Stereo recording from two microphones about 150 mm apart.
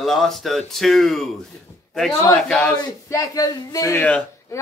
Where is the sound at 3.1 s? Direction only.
25° left (ahead or behind).